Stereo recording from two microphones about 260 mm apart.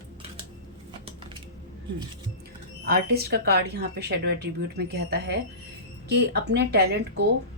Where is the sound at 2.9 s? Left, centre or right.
Right.